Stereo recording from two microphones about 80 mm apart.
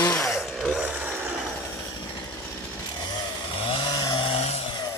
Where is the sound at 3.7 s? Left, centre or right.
Left.